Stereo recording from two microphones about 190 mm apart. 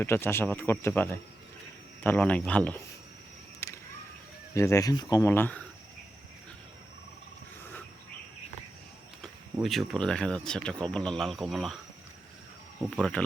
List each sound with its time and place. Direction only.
0.0 s speech: 10° left (ahead or behind)
3.6 s a sound: 15° left (ahead or behind)
4.5 s speech: 15° left (ahead or behind)
7.6 s a sound: 10° left (ahead or behind)
9.2 s speech: centre (ahead or behind)
12.9 s speech: 5° left (ahead or behind)